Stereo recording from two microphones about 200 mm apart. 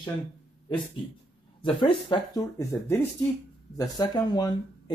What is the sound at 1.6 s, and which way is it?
Speech, 25° left (ahead or behind).